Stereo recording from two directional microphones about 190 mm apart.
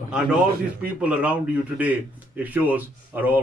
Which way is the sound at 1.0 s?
5° right (ahead or behind).